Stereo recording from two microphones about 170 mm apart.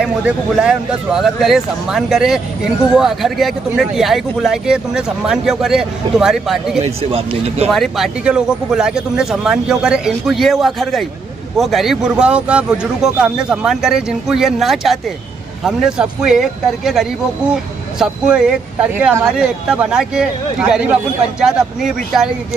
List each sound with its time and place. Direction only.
0.0 s speech: 5° right (ahead or behind)
6.8 s speech: 35° right (ahead or behind)
7.7 s speech: centre (ahead or behind)